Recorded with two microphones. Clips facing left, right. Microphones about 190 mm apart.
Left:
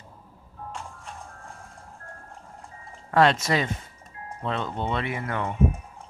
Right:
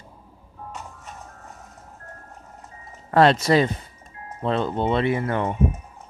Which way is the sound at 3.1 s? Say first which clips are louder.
Right 4 dB; 35° right (ahead or behind).